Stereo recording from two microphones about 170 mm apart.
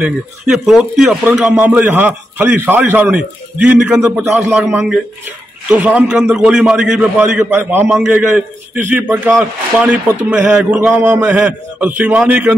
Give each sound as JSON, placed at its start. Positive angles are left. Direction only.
{"t": 0.0, "sound": "a man's voice", "side_deg": 0}